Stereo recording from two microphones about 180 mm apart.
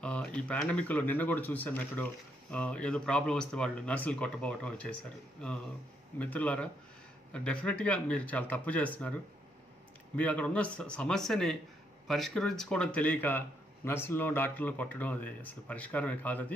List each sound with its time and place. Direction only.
0.0 s speech: 5° left (ahead or behind)
6.1 s speech: 10° left (ahead or behind)
10.1 s a man's voice: 10° left (ahead or behind)